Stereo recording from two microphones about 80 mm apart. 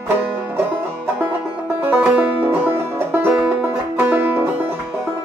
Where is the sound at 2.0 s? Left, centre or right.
Right.